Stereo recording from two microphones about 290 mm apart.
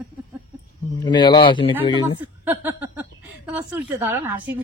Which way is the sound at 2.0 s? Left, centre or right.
Centre.